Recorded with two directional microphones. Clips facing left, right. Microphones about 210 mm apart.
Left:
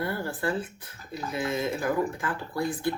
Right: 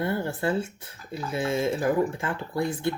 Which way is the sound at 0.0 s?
25° right (ahead or behind).